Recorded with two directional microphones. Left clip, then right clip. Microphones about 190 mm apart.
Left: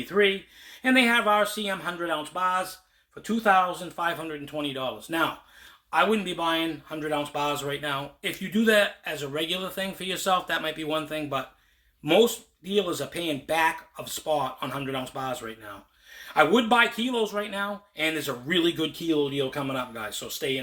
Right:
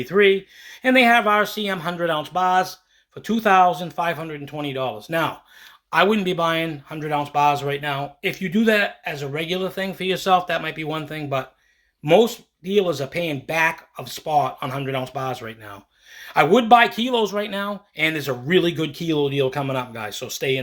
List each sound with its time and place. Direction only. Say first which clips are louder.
0.0 s speech: right 7 dB; 30° right (ahead or behind); by 2.6 s 55° right (ahead or behind)
3.2 s speech: right 6 dB; 35° right (ahead or behind)
5.9 s speech: right 5 dB; 45° right (ahead or behind)
18.0 s speech: right 6 dB; 30° right (ahead or behind)